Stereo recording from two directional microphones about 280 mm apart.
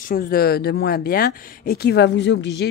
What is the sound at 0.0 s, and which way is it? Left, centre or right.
A woman's voice, left.